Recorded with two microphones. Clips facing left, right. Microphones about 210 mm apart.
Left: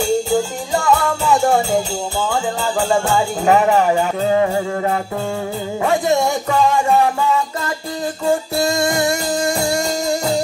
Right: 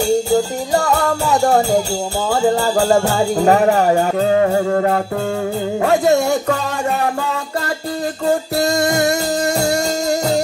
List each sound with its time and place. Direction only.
0.7 s music: 40° right (ahead or behind)
5.8 s music: 65° right (ahead or behind)
8.6 s music: 40° right (ahead or behind)